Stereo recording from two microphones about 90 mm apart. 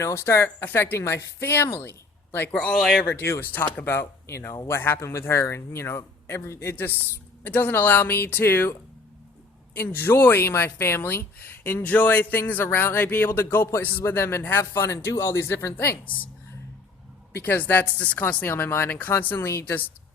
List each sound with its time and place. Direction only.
0.0 s speech: 30° left (ahead or behind)
2.7 s speech: 5° right (ahead or behind)
3.1 s speech: 25° left (ahead or behind)
9.7 s speech: 25° left (ahead or behind)
17.3 s speech: 20° left (ahead or behind)